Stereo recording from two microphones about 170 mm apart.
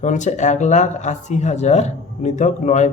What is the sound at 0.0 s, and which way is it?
A man's voice, 45° left (ahead or behind).